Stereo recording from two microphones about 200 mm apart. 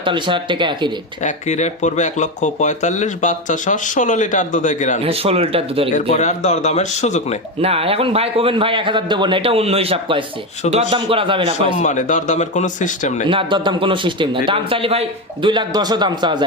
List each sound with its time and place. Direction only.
0.0 s a man's voice: 25° right (ahead or behind)
1.2 s speech: 35° left (ahead or behind)
5.0 s a man's voice: 30° right (ahead or behind)
5.9 s speech: 35° left (ahead or behind)
7.6 s a man's voice: 30° right (ahead or behind)
11.8 s speech: 40° left (ahead or behind)
13.2 s a man's voice: 25° right (ahead or behind)